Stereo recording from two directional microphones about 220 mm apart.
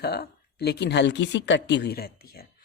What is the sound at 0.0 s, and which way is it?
Speech, 45° left (ahead or behind).